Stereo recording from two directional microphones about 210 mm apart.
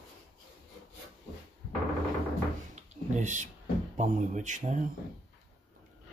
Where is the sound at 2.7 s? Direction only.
35° right (ahead or behind).